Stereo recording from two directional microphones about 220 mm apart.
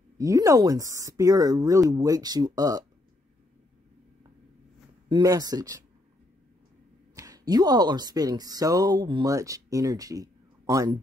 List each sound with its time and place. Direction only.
0.2 s speech: 15° right (ahead or behind)
5.1 s speech: 15° right (ahead or behind)
7.2 s speech: 15° right (ahead or behind)